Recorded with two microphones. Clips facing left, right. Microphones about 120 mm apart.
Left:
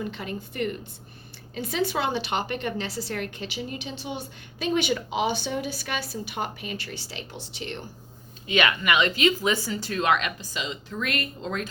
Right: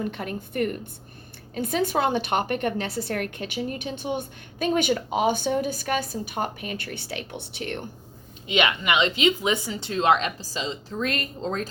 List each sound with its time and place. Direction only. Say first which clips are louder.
0.0 s a woman's voice: right 2 dB; 55° right (ahead or behind)
8.4 s speech: even; 20° right (ahead or behind)